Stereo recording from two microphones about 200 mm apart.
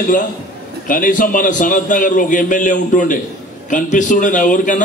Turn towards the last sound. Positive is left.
turn(degrees=40)  # may be behind; listen again after turning